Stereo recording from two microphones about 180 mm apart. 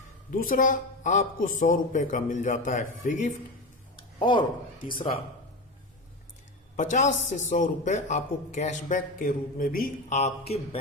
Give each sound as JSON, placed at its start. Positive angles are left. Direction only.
{"t": 0.3, "sound": "a man's voice", "side_deg": 50}
{"t": 4.2, "sound": "speech", "side_deg": 25}
{"t": 6.7, "sound": "a man's voice", "side_deg": 45}